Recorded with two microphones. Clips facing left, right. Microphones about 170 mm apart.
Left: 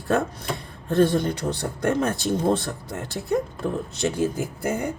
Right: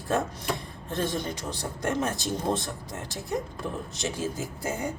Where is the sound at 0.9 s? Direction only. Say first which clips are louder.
Left 10 dB; 60° left (ahead or behind).